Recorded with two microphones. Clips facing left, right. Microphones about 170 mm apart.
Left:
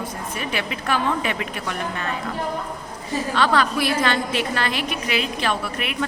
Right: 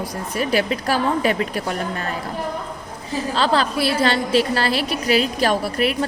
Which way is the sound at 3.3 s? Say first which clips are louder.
Right 1 dB; 30° right (ahead or behind).